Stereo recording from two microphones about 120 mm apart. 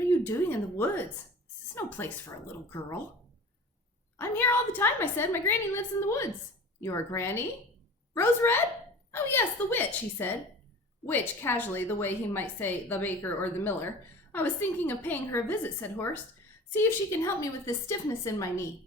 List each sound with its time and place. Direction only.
0.1 s a woman's voice: 20° left (ahead or behind)
4.2 s a woman's voice: 20° left (ahead or behind)